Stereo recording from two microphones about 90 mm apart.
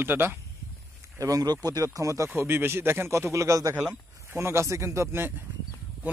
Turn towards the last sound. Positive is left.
turn(degrees=-35)  # may be behind; listen again after turning